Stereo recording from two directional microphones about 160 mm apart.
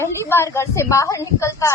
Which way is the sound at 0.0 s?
15° left (ahead or behind).